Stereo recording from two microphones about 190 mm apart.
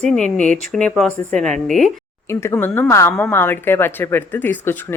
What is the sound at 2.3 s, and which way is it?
A woman's voice, 15° left (ahead or behind).